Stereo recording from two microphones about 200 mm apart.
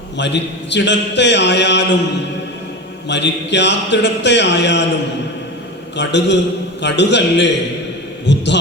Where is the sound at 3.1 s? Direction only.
60° left (ahead or behind).